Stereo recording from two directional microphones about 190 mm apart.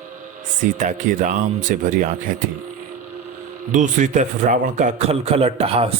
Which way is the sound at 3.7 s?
40° right (ahead or behind).